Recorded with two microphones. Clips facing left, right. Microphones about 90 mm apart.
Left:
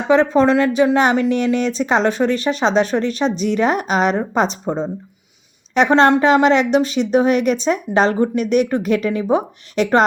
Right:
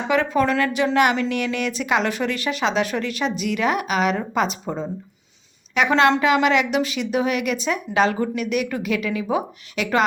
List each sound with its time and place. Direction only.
0.1 s speech: 25° left (ahead or behind)